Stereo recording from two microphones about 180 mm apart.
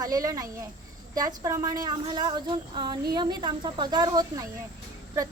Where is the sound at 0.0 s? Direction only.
20° right (ahead or behind).